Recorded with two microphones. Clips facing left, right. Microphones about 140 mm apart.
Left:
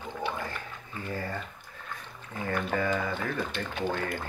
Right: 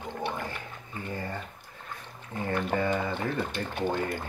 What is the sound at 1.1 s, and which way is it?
Speech, 15° right (ahead or behind).